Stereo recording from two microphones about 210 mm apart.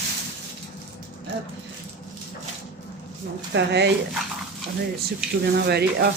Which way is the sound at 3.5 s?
55° right (ahead or behind).